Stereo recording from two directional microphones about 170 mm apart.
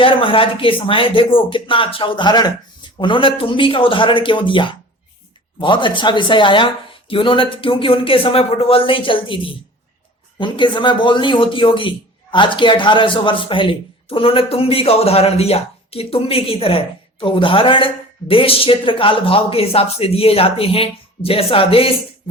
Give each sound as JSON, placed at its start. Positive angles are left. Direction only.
{"t": 0.0, "sound": "speech", "side_deg": 30}